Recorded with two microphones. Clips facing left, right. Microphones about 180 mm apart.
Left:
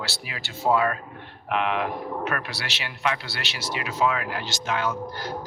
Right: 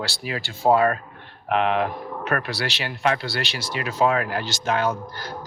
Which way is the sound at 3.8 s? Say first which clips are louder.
Right 4 dB; 40° right (ahead or behind).